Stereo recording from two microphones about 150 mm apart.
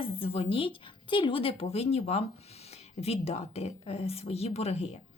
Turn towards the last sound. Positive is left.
turn(degrees=45)  # may be behind; listen again after turning